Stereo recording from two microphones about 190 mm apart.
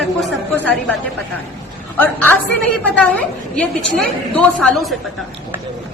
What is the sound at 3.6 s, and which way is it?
A man's voice, 5° left (ahead or behind).